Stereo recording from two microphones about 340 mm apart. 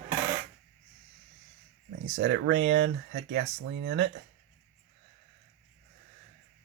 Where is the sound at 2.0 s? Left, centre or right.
Right.